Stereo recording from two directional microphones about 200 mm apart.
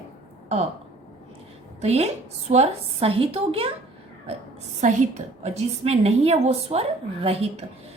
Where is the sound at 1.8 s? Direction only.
30° right (ahead or behind).